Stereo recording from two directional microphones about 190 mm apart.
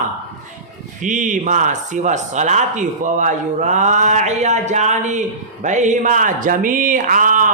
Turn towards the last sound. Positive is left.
turn(degrees=-45)  # may be behind; listen again after turning